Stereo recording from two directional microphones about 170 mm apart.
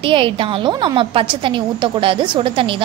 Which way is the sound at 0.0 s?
30° right (ahead or behind).